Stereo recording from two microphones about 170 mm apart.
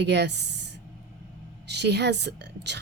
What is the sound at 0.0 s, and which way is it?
Speech, 90° right.